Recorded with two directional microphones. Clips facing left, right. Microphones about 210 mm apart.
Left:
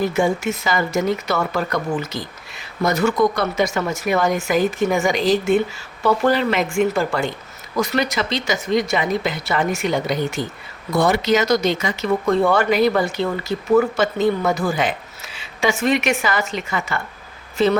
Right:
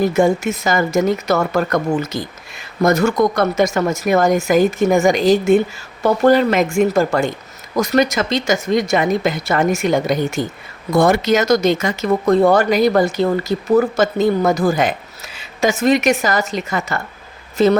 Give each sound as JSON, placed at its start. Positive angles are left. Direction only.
{"t": 0.0, "sound": "speech", "side_deg": -40}